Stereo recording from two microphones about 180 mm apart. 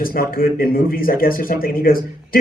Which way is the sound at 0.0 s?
55° left (ahead or behind).